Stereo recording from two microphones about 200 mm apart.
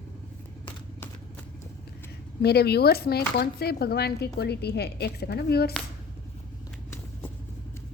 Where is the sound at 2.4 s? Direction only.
55° left (ahead or behind).